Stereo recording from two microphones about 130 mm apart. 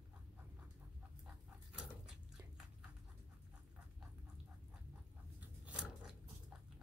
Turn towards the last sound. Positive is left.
turn(degrees=-5)  # may be behind; listen again after turning